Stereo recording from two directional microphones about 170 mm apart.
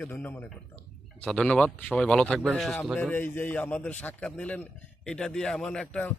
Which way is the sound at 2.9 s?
10° left (ahead or behind).